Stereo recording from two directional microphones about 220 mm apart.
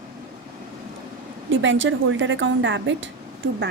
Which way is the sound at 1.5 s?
60° right (ahead or behind).